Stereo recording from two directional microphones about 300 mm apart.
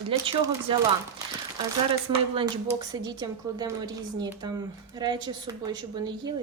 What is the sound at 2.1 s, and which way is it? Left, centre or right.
Speech, centre.